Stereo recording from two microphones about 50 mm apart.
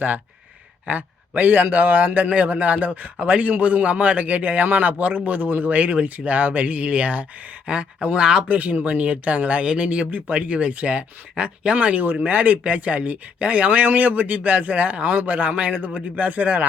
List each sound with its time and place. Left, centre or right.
0.9 s a man's voice: right
8.2 s speech: centre
8.4 s a man's voice: right